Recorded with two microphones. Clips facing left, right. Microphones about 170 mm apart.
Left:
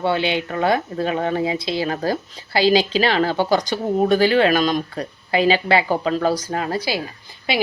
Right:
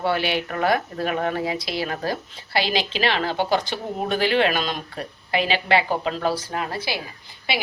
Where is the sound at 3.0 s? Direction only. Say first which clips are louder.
Left 4 dB; 40° left (ahead or behind).